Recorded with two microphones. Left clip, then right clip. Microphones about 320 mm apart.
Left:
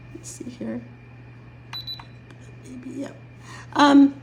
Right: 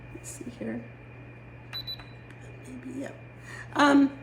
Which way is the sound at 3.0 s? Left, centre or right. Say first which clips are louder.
Left 2 dB; left.